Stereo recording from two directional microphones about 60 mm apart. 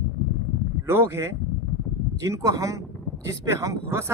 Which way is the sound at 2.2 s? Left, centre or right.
Right.